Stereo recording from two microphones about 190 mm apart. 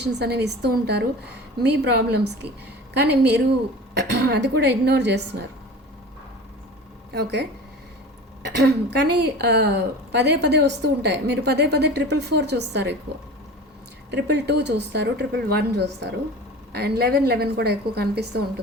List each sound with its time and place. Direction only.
0.0 s a woman's voice: 60° right (ahead or behind)
7.1 s a woman's voice: 60° right (ahead or behind)
14.1 s a woman's voice: 65° right (ahead or behind)